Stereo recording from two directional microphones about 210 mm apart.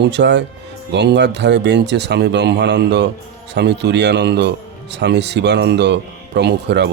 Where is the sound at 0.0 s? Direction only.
55° right (ahead or behind).